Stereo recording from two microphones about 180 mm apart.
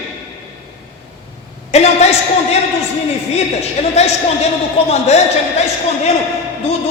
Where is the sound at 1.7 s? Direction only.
35° left (ahead or behind).